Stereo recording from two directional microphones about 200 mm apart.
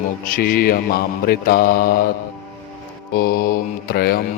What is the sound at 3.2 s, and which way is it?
Mantra, 50° left (ahead or behind).